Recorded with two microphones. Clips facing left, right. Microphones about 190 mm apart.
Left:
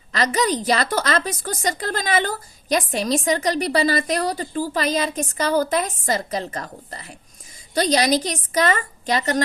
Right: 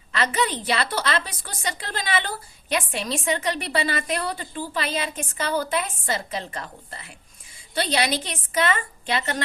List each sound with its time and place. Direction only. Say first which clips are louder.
0.1 s a woman's voice: left 4 dB; 40° left (ahead or behind)